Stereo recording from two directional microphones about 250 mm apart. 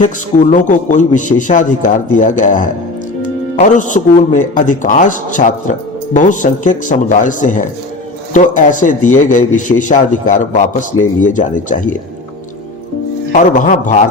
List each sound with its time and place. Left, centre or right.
0.0 s a man's voice: left
13.3 s speech: left